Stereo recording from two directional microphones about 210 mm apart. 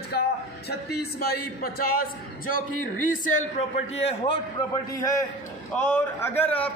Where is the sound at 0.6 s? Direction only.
50° left (ahead or behind).